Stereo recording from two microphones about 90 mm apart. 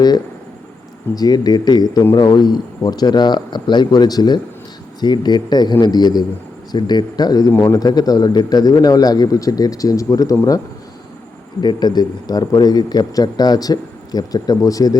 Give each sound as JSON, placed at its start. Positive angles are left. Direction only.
{"t": 1.1, "sound": "a man's voice", "side_deg": 45}
{"t": 11.6, "sound": "a man's voice", "side_deg": 55}